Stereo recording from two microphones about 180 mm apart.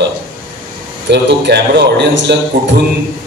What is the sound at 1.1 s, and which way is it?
A man's voice, 70° right (ahead or behind).